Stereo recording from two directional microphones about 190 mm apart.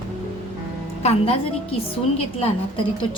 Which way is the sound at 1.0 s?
30° left (ahead or behind).